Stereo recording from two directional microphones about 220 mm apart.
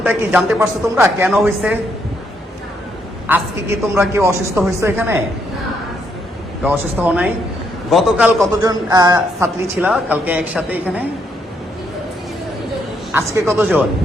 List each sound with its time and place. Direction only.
0.0 s a woman's voice: 5° right (ahead or behind)
3.3 s a woman's voice: 10° right (ahead or behind)
6.6 s a woman's voice: 5° right (ahead or behind)
8.6 s a woman's voice: 15° right (ahead or behind)
13.1 s a man's voice: 10° right (ahead or behind)